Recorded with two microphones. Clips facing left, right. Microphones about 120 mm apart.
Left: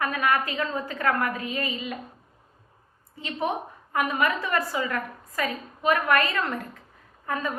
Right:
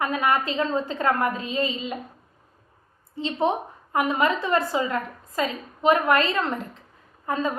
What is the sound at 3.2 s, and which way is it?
A woman's voice, 25° right (ahead or behind).